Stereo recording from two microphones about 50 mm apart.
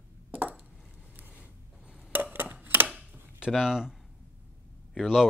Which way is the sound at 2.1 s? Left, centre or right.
Right.